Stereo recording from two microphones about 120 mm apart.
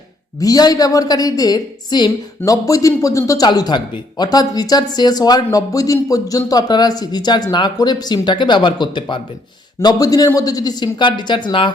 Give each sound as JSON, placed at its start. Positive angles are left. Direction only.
{"t": 0.3, "sound": "speech", "side_deg": 30}